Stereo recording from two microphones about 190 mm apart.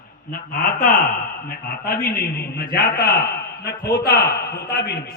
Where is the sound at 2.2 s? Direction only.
55° left (ahead or behind).